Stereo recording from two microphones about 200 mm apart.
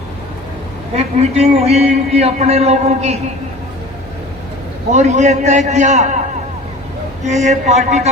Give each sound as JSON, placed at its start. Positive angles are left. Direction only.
{"t": 0.9, "sound": "a man's voice", "side_deg": -30}
{"t": 4.9, "sound": "a man's voice", "side_deg": -35}
{"t": 7.3, "sound": "a man's voice", "side_deg": -35}